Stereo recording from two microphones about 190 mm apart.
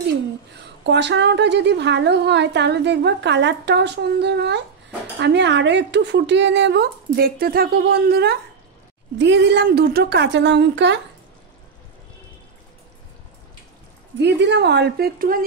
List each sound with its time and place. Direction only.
0.8 s a woman's voice: 65° right (ahead or behind)
9.2 s speech: 70° right (ahead or behind)
14.1 s a woman's voice: 65° right (ahead or behind); by 15.4 s 50° right (ahead or behind)